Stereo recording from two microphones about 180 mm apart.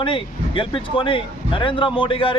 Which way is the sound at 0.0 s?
30° left (ahead or behind).